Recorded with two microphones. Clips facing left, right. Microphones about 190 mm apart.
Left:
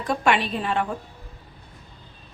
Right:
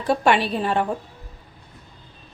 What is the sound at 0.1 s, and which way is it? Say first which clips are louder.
Speech: right 3 dB; 35° right (ahead or behind).